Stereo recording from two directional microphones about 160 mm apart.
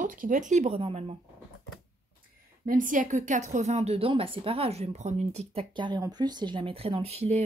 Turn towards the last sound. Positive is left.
turn(degrees=-40)  # may be behind; listen again after turning